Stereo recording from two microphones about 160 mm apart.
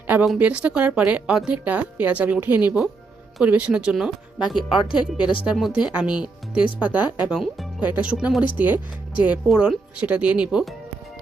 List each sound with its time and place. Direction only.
0.1 s a woman's voice: 10° right (ahead or behind)
4.5 s speech: 30° left (ahead or behind)
5.5 s a woman's voice: 5° right (ahead or behind)